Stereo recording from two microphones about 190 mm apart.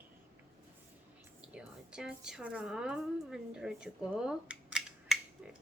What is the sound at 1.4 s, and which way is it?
A woman's voice, 5° right (ahead or behind).